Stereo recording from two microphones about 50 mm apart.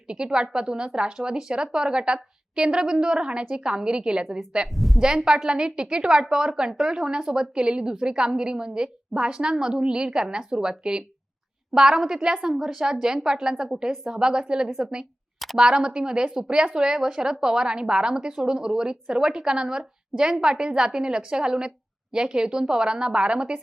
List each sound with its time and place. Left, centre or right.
0.1 s a woman's voice: centre
4.7 s speech: centre
4.9 s a woman's voice: centre